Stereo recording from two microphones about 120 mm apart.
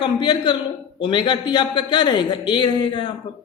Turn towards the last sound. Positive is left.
turn(degrees=40)  # may be behind; listen again after turning